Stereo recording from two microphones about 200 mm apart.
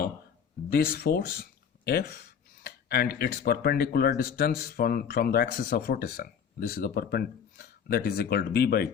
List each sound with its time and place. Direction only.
0.7 s speech: 50° left (ahead or behind)